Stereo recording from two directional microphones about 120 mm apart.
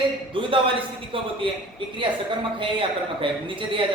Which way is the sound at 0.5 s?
45° right (ahead or behind).